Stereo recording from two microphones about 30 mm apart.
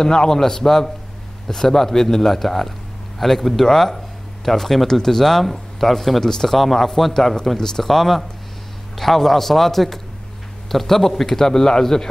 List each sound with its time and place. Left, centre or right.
0.0 s speech: left; by 6.2 s centre
6.2 s speech: centre
7.5 s speech: centre
7.8 s a man's voice: centre